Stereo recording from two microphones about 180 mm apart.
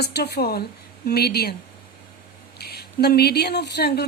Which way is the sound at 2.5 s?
65° left (ahead or behind).